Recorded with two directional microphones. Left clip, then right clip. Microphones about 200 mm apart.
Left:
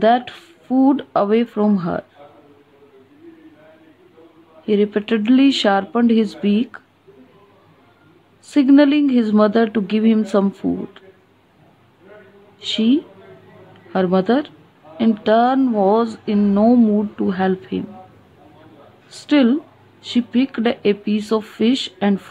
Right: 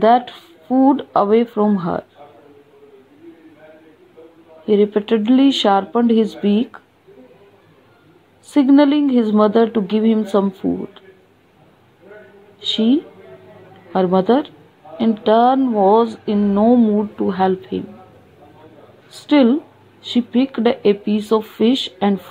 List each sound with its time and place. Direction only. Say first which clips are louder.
0.0 s speech: right 2 dB; 15° left (ahead or behind)
4.6 s speech: right 3 dB; 15° left (ahead or behind)
8.5 s speech: even; 15° left (ahead or behind)
12.5 s speech: right 1 dB; 15° left (ahead or behind)
19.0 s speech: right 2 dB; 15° left (ahead or behind)